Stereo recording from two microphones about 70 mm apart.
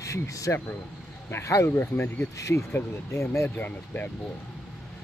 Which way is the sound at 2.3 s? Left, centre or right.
Left.